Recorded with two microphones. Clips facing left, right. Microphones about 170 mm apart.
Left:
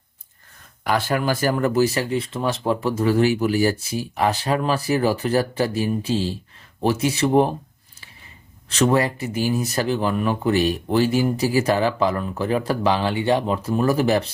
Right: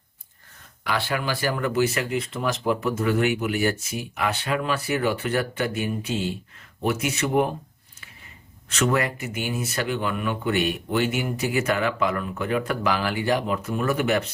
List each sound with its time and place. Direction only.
0.9 s speech: 45° left (ahead or behind)
8.7 s speech: 30° left (ahead or behind)